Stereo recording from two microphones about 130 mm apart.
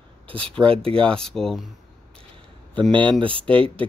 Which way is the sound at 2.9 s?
40° right (ahead or behind).